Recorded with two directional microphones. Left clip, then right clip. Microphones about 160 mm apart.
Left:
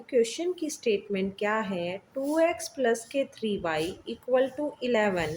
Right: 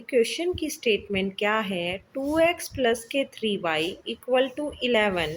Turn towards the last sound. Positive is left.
turn(degrees=-15)  # may be behind; listen again after turning